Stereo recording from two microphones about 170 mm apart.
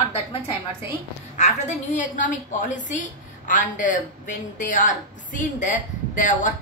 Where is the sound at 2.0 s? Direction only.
50° left (ahead or behind).